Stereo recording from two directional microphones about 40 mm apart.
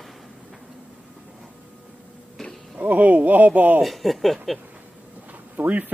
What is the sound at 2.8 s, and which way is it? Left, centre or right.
Speech, right.